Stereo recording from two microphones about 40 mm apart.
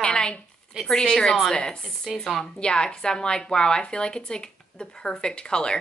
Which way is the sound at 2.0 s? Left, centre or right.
Centre.